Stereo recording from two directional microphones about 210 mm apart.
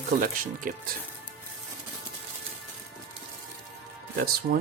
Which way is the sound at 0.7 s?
40° right (ahead or behind).